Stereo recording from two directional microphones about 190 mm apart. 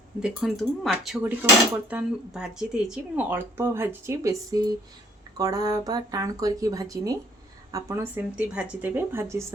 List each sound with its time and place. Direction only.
0.2 s speech: centre (ahead or behind)